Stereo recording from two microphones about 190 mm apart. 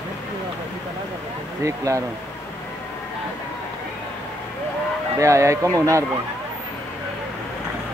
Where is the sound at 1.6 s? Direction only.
15° right (ahead or behind).